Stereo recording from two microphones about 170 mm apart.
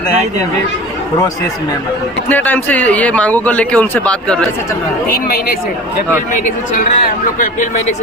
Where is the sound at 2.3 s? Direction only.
10° left (ahead or behind).